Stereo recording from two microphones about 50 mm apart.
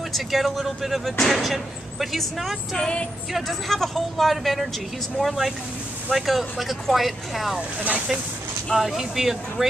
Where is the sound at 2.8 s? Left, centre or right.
Centre.